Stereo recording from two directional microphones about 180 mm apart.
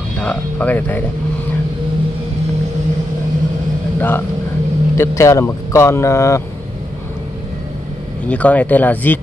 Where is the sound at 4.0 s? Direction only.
10° left (ahead or behind).